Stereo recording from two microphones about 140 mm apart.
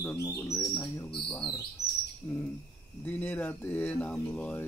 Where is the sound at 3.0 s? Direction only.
15° left (ahead or behind).